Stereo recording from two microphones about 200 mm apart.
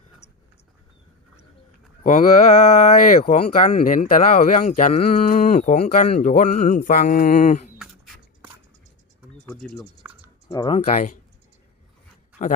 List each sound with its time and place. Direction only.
2.0 s speech: 35° left (ahead or behind)
7.8 s a sound: 5° right (ahead or behind)
10.5 s speech: 25° left (ahead or behind)
12.4 s a man's voice: 35° left (ahead or behind)